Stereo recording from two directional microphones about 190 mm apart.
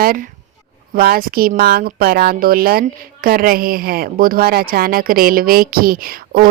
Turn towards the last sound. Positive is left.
turn(degrees=-50)  # may be behind; listen again after turning